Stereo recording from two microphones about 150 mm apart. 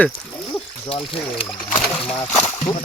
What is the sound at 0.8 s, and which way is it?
Speech, 40° left (ahead or behind).